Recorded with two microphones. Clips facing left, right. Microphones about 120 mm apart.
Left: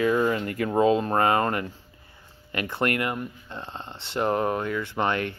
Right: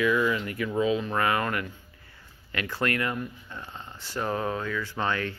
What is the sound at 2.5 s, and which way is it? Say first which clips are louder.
Speech: left 3 dB; 20° left (ahead or behind).